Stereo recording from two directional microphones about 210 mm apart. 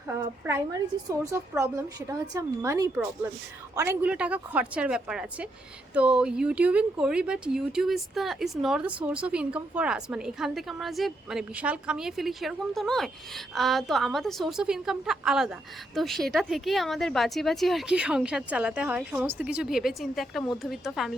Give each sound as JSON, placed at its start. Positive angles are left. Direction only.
{"t": 0.1, "sound": "a woman's voice", "side_deg": -15}